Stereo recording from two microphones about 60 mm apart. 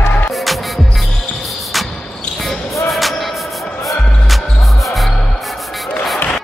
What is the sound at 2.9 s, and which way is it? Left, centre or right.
Music, centre.